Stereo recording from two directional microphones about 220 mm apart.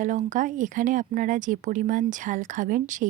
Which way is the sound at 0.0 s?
35° right (ahead or behind).